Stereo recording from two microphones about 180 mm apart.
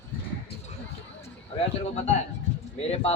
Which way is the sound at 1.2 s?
35° left (ahead or behind).